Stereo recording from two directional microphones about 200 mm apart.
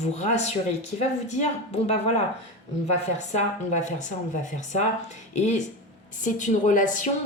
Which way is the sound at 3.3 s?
35° left (ahead or behind).